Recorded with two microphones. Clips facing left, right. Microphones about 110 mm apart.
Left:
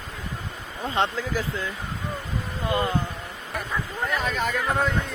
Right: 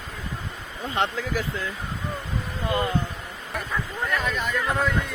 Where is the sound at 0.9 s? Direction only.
30° left (ahead or behind).